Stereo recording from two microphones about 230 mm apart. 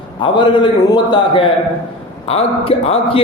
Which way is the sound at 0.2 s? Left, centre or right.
Left.